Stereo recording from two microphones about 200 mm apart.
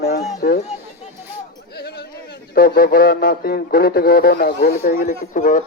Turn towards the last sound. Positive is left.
turn(degrees=40)  # may be behind; listen again after turning